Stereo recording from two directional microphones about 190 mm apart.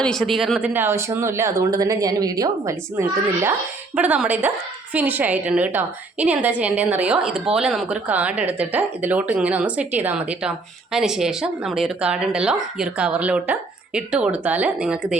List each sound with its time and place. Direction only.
0.0 s a woman's voice: centre (ahead or behind)